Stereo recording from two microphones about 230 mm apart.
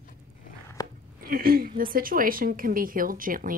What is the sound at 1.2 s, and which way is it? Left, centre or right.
A woman's voice, right.